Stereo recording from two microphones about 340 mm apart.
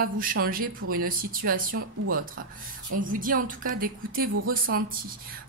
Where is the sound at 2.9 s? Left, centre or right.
Right.